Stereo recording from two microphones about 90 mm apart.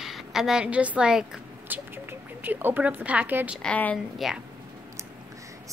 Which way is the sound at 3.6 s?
15° left (ahead or behind).